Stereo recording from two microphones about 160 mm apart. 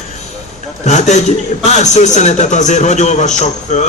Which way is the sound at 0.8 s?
45° left (ahead or behind).